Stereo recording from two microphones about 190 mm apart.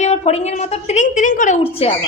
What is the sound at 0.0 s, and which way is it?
A woman's voice, 35° left (ahead or behind).